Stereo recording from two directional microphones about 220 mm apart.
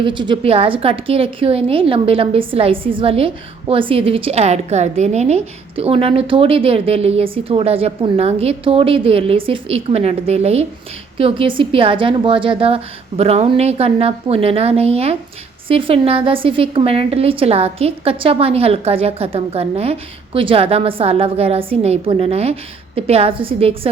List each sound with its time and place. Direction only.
0.0 s a woman's voice: 20° right (ahead or behind)